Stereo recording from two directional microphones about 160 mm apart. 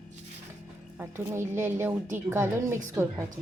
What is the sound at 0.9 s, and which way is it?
A woman's voice, 15° right (ahead or behind).